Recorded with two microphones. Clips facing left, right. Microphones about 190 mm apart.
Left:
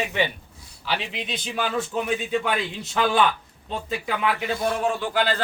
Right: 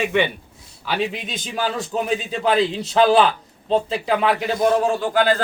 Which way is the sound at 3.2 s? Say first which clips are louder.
Right 2 dB; 85° right.